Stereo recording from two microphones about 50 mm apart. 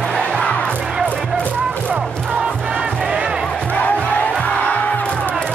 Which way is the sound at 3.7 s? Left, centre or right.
Left.